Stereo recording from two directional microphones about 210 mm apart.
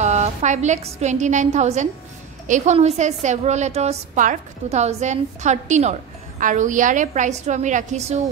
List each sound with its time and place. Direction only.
0.0 s a woman's voice: 35° right (ahead or behind)